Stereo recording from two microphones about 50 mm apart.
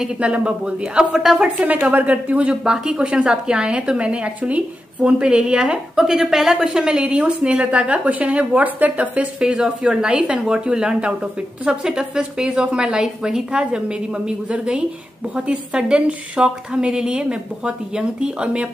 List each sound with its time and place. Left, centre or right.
0.0 s a woman's voice: centre
9.4 s a woman's voice: centre